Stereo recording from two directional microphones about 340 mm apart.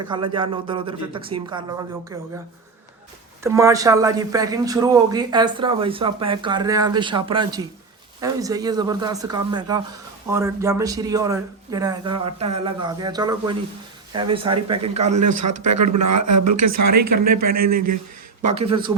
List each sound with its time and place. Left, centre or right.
0.1 s a man's voice: centre
3.4 s a man's voice: centre
15.2 s speech: right
17.3 s a man's voice: right